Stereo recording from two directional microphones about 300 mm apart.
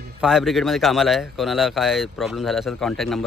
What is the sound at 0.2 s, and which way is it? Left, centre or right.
Speech, centre.